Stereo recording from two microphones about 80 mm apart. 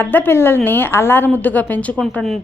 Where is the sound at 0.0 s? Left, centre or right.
Left.